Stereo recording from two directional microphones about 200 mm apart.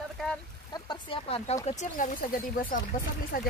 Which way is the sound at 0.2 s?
Centre (ahead or behind).